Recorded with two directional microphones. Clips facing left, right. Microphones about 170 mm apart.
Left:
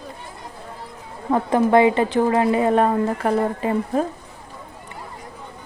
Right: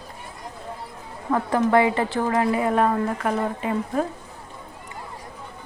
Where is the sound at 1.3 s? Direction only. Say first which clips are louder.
Left 3 dB; 20° left (ahead or behind).